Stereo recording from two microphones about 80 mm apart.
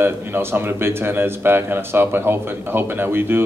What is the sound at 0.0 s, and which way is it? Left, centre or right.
Speech, right.